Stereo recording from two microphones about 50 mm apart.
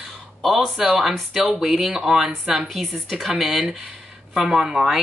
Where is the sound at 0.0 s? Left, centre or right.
Centre.